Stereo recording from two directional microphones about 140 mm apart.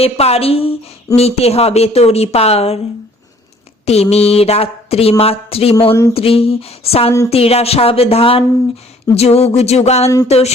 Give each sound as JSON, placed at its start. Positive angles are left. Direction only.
{"t": 0.0, "sound": "a woman's voice", "side_deg": 45}
{"t": 3.8, "sound": "a woman's voice", "side_deg": 50}